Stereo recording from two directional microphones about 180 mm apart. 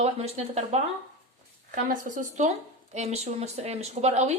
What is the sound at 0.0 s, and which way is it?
A woman's voice, 35° right (ahead or behind).